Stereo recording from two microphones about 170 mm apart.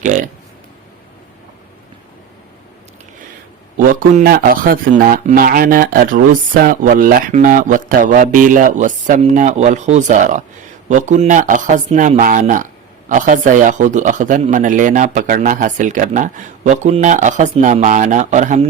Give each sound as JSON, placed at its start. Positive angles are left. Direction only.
{"t": 0.0, "sound": "speech", "side_deg": -45}
{"t": 3.8, "sound": "speech", "side_deg": -55}